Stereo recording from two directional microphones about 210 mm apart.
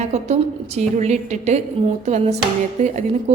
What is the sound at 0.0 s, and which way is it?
Speech, 30° right (ahead or behind).